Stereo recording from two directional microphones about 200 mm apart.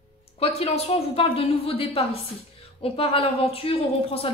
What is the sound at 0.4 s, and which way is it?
Speech, 30° left (ahead or behind).